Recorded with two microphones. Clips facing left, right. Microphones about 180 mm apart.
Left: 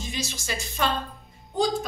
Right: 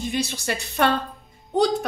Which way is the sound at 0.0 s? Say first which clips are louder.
Right 7 dB; 60° right (ahead or behind).